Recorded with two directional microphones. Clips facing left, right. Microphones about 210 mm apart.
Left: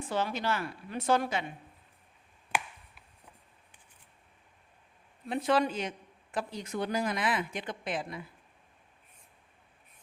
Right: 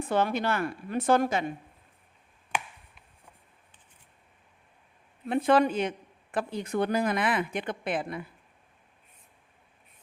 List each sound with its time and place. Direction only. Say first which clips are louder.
0.0 s a woman's voice: right 5 dB; 60° right (ahead or behind)
5.3 s speech: right 5 dB; 55° right (ahead or behind)